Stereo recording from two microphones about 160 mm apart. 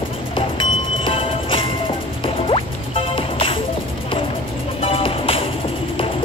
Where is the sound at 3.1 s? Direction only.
35° left (ahead or behind).